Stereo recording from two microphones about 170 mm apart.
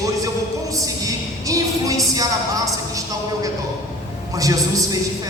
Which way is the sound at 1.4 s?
20° right (ahead or behind).